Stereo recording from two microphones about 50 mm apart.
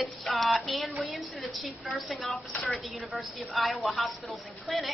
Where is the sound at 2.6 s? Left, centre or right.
Left.